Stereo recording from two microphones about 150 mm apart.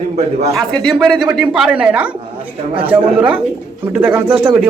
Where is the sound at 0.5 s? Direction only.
5° left (ahead or behind).